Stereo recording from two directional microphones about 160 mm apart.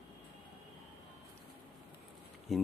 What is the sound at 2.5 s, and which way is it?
Speech, centre (ahead or behind).